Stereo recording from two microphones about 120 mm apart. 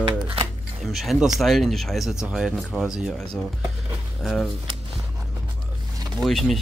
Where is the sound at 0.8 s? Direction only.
Centre (ahead or behind).